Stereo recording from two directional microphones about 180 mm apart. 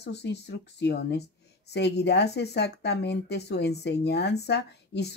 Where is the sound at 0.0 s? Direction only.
70° left (ahead or behind).